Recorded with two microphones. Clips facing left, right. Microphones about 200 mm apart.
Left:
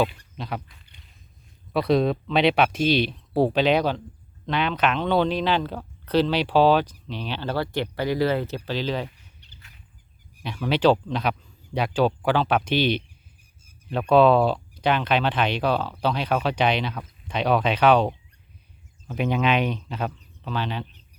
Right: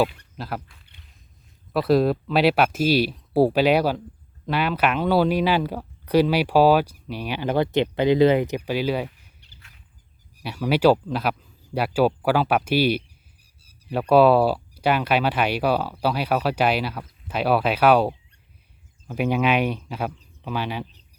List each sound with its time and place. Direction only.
0.3 s speech: 5° right (ahead or behind)
10.4 s speech: 10° right (ahead or behind)
14.1 s speech: 5° right (ahead or behind)